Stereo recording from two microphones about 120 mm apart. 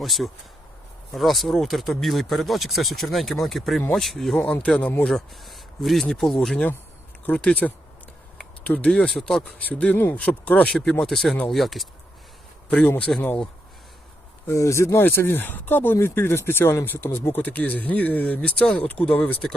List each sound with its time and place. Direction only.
0.0 s speech: centre (ahead or behind)
4.4 s speech: 10° left (ahead or behind)
5.1 s speech: centre (ahead or behind)
12.7 s speech: 15° left (ahead or behind)
14.4 s speech: 25° left (ahead or behind)